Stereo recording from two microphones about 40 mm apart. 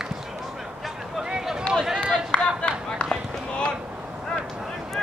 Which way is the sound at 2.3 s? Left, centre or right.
Left.